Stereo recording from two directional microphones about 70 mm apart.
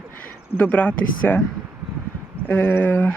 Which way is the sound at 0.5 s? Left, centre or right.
Left.